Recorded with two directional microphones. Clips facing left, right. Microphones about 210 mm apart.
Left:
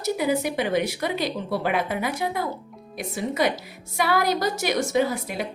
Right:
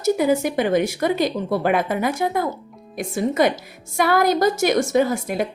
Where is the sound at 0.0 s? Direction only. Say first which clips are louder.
Right 5 dB; 45° right (ahead or behind).